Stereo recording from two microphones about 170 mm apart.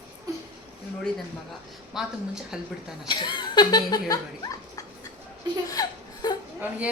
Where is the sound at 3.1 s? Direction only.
25° left (ahead or behind).